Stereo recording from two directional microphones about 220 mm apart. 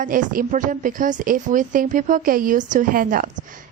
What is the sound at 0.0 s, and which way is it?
A woman's voice, 35° right (ahead or behind).